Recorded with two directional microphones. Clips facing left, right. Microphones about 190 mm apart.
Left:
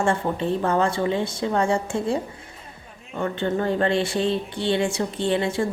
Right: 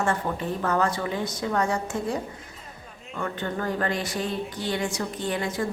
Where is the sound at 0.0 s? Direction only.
25° left (ahead or behind).